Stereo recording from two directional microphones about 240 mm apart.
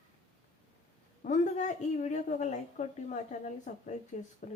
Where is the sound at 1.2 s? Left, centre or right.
Left.